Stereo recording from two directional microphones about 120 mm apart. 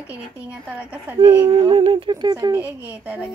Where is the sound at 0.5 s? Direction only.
10° right (ahead or behind).